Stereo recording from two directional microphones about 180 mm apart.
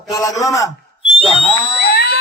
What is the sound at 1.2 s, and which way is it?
Speech, 30° left (ahead or behind).